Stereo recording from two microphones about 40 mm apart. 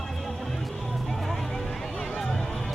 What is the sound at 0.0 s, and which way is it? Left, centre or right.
Music, centre.